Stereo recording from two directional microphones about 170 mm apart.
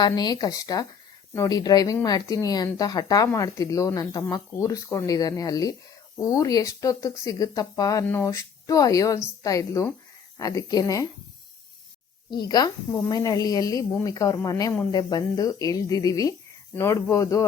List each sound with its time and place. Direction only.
0.0 s speech: 25° left (ahead or behind)
12.3 s speech: 25° left (ahead or behind)